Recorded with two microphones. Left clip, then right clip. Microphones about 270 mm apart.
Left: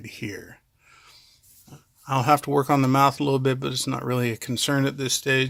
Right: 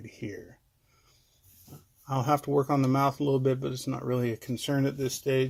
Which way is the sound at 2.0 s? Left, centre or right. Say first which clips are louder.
Left 7 dB; left.